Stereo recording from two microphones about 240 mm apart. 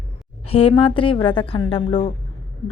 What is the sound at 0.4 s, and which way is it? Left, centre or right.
Speech, left.